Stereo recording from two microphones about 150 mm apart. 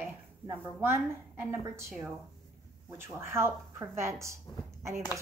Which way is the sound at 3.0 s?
15° right (ahead or behind).